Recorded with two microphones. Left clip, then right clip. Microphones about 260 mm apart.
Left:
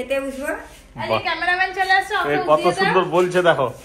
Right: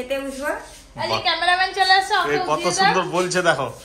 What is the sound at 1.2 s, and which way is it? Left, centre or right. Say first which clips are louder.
Speech: right 4 dB; right.